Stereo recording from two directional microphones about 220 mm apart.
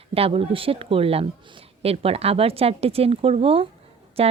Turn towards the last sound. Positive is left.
turn(degrees=-25)  # may be behind; listen again after turning